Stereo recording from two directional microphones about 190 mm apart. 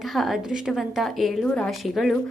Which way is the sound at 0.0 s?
Centre (ahead or behind).